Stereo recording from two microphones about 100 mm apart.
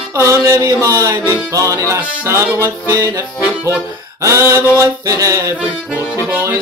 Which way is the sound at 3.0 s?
35° right (ahead or behind).